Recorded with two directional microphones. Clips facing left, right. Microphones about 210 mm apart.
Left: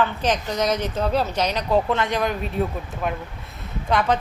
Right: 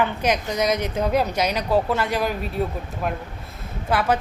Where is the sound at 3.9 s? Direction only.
5° right (ahead or behind).